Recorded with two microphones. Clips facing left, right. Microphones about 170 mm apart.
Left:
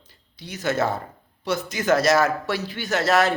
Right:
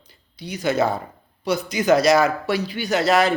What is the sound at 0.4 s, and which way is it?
Speech, 15° right (ahead or behind).